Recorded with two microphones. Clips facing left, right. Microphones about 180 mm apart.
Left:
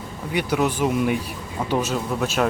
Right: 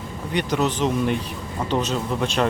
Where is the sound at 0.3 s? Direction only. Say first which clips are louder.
Left 1 dB; 10° left (ahead or behind).